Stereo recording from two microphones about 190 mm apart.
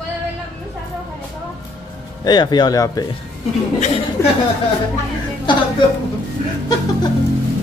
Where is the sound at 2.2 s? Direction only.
20° left (ahead or behind).